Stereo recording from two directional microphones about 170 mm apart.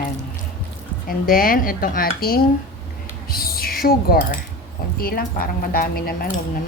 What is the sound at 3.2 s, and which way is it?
Music, 60° left (ahead or behind).